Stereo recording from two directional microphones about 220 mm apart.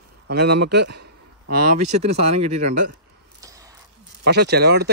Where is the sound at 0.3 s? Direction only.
50° right (ahead or behind).